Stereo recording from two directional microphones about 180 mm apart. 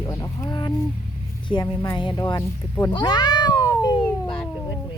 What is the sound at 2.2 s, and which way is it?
Speech, 15° left (ahead or behind).